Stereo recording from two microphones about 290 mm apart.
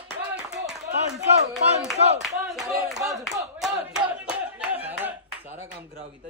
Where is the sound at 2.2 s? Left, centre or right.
Centre.